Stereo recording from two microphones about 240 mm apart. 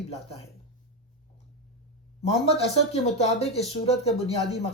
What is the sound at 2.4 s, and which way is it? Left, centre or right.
Speech, left.